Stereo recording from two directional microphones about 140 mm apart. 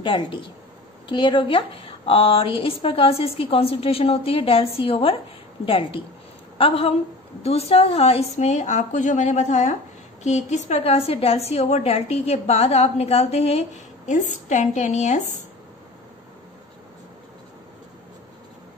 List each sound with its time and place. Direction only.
0.0 s a woman's voice: 35° left (ahead or behind); by 15.2 s 55° left (ahead or behind)